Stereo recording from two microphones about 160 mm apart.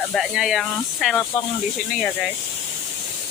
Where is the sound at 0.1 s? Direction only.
Centre (ahead or behind).